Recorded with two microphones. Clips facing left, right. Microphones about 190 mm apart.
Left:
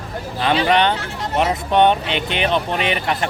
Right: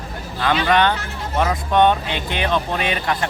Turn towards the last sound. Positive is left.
turn(degrees=20)  # may be behind; listen again after turning